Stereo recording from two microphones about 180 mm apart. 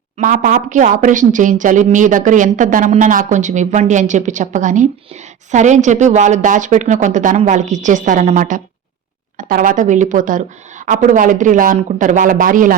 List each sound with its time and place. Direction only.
0.2 s speech: 45° right (ahead or behind)